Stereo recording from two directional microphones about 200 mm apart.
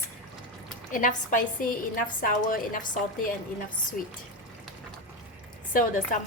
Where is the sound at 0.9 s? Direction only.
40° left (ahead or behind).